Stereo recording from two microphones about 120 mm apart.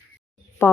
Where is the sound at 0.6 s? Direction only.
20° left (ahead or behind).